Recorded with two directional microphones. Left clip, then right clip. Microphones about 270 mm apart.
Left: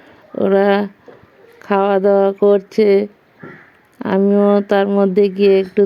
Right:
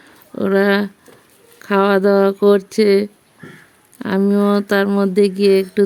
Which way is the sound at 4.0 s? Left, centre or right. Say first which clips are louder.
Left 3 dB; centre.